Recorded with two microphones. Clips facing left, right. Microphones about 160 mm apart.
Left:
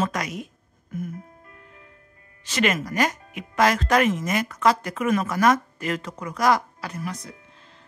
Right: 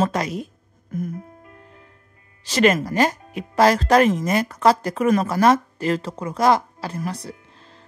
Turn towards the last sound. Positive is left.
turn(degrees=-35)  # may be behind; listen again after turning